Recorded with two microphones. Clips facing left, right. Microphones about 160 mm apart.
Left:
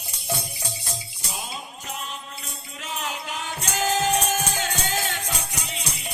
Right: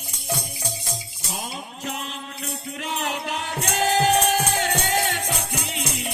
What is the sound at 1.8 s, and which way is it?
Music, 75° right (ahead or behind).